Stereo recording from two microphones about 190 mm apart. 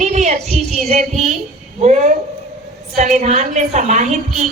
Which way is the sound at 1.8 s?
35° right (ahead or behind).